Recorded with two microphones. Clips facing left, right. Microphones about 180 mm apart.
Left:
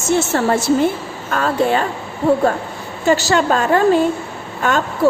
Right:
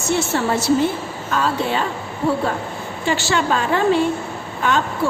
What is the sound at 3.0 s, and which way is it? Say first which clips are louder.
A woman's voice: left 5 dB; 40° left (ahead or behind).